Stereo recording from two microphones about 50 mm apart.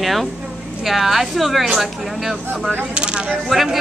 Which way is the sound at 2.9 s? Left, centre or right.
Centre.